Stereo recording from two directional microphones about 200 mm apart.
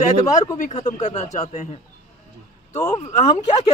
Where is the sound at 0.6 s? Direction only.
35° left (ahead or behind).